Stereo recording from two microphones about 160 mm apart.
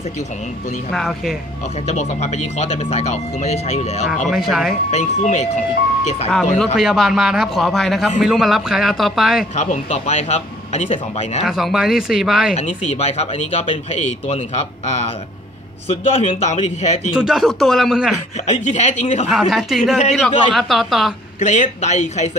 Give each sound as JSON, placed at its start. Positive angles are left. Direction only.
{"t": 0.9, "sound": "speech", "side_deg": 0}
{"t": 1.9, "sound": "speech", "side_deg": 45}
{"t": 4.3, "sound": "speech", "side_deg": 0}
{"t": 4.9, "sound": "speech", "side_deg": 45}
{"t": 6.3, "sound": "speech", "side_deg": 0}
{"t": 9.6, "sound": "speech", "side_deg": 45}
{"t": 11.4, "sound": "speech", "side_deg": 0}
{"t": 12.5, "sound": "speech", "side_deg": 45}
{"t": 16.2, "sound": "speech", "side_deg": 45}
{"t": 17.1, "sound": "speech", "side_deg": -5}
{"t": 18.6, "sound": "speech", "side_deg": 45}
{"t": 19.2, "sound": "speech", "side_deg": 0}
{"t": 21.4, "sound": "speech", "side_deg": 45}